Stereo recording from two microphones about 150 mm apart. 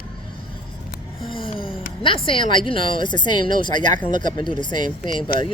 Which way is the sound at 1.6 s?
35° left (ahead or behind).